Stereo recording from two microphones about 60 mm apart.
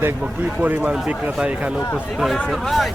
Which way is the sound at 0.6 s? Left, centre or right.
Right.